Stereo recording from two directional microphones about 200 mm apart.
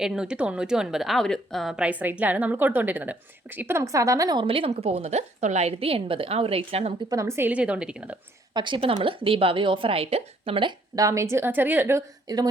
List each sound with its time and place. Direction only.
0.0 s a woman's voice: 5° right (ahead or behind); by 6.9 s 30° right (ahead or behind)
7.1 s a woman's voice: 15° right (ahead or behind)
8.5 s a woman's voice: 25° right (ahead or behind)